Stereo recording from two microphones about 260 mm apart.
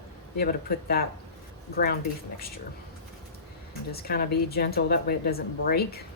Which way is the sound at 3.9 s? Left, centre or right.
Left.